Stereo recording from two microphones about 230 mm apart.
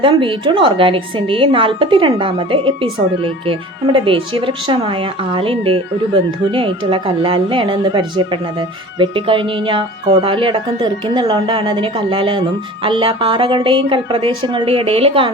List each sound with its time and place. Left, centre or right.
0.0 s a woman's voice: right